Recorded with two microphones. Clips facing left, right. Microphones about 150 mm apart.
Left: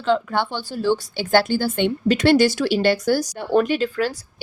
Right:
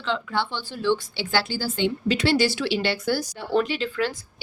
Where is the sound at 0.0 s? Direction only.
45° left (ahead or behind).